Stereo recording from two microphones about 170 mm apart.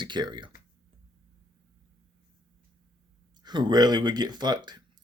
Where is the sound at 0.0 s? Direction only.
25° right (ahead or behind).